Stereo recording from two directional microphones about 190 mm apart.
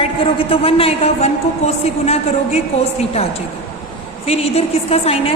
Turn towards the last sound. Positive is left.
turn(degrees=30)  # may be behind; listen again after turning